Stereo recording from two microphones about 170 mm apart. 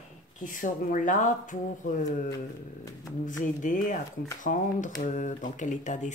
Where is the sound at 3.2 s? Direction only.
50° left (ahead or behind).